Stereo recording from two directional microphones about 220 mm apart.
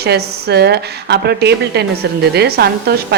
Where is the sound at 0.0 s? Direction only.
45° right (ahead or behind).